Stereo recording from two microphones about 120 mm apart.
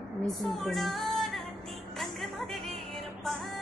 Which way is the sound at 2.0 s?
Centre (ahead or behind).